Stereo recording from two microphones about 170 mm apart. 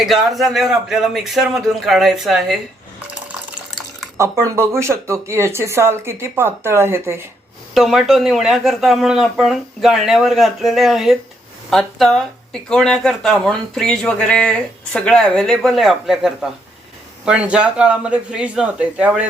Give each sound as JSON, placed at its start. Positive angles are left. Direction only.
{"t": 0.0, "sound": "speech", "side_deg": 0}
{"t": 4.2, "sound": "speech", "side_deg": -15}
{"t": 7.7, "sound": "speech", "side_deg": 0}